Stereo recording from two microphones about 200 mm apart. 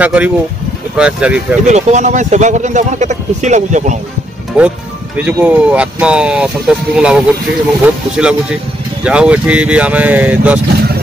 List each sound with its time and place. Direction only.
0.0 s speech: 5° right (ahead or behind)
1.7 s speech: 35° right (ahead or behind)
4.6 s speech: 5° right (ahead or behind)